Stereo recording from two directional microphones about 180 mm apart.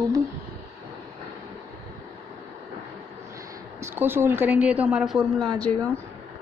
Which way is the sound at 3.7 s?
15° right (ahead or behind).